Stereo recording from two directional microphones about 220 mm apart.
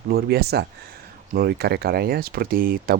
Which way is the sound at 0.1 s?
45° right (ahead or behind).